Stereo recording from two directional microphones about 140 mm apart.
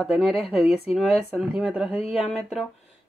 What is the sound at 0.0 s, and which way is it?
Speech, 5° right (ahead or behind).